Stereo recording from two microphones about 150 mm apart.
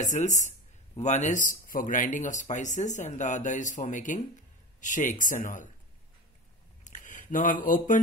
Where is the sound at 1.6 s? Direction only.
65° left (ahead or behind).